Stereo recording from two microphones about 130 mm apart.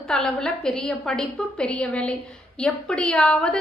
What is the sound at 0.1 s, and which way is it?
A woman's voice, 5° left (ahead or behind).